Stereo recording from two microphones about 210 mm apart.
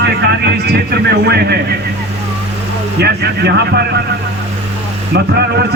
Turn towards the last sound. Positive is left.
turn(degrees=-50)  # may be behind; listen again after turning